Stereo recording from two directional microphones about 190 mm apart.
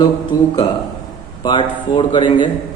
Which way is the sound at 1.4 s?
25° left (ahead or behind).